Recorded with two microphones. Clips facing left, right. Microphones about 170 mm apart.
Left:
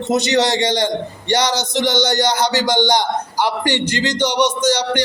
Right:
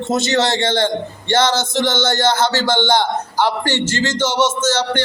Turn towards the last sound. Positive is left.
turn(degrees=15)  # may be behind; listen again after turning